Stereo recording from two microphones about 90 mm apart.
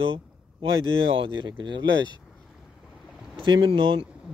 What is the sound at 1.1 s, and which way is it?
Speech, 70° right (ahead or behind).